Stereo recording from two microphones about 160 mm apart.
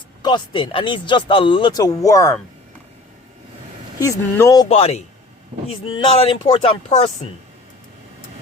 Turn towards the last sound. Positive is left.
turn(degrees=35)  # may be behind; listen again after turning